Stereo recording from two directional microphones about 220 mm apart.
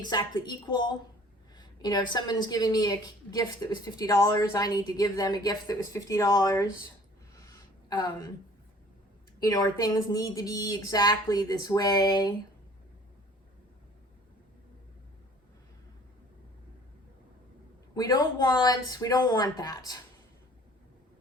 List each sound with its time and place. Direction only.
0.0 s a woman's voice: 20° left (ahead or behind)
7.3 s a sound: 15° left (ahead or behind)
9.4 s a woman's voice: 15° left (ahead or behind)
17.9 s a woman's voice: 15° left (ahead or behind)